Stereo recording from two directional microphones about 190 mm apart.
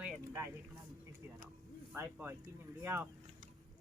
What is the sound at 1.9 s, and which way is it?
Speech, 10° right (ahead or behind).